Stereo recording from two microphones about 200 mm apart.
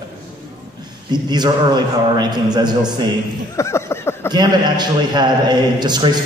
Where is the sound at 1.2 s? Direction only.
20° right (ahead or behind).